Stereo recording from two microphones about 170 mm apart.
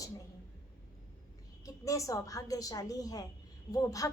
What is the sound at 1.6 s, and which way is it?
A woman's voice, 20° left (ahead or behind).